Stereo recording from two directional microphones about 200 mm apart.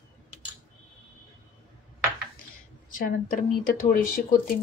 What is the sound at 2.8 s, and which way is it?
Speech, 40° left (ahead or behind).